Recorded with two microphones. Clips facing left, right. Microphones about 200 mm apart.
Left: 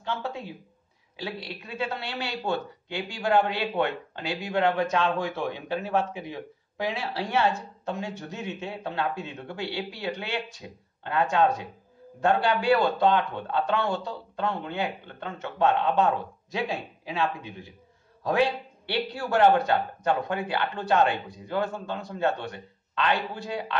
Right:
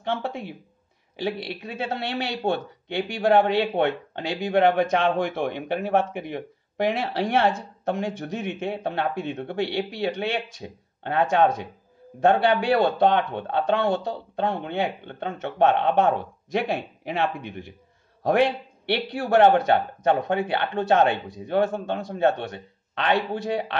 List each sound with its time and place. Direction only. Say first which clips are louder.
0.0 s speech: right 4 dB; 65° right (ahead or behind)